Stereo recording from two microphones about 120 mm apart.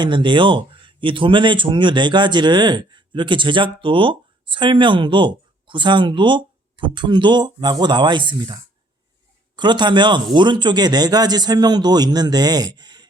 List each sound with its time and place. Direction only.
0.0 s speech: 40° right (ahead or behind)
9.6 s speech: 40° right (ahead or behind)